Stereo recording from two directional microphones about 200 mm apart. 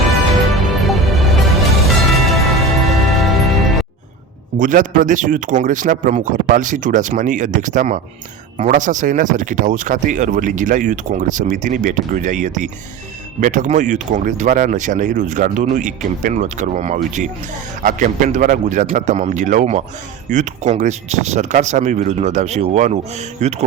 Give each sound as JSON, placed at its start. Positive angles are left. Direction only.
{"t": 0.9, "sound": "music", "side_deg": 0}
{"t": 4.5, "sound": "speech", "side_deg": -40}